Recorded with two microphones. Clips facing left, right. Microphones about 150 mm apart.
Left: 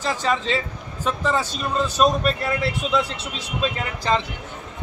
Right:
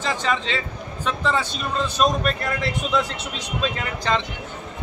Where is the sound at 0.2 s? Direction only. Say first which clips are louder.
Left 2 dB; 40° left (ahead or behind).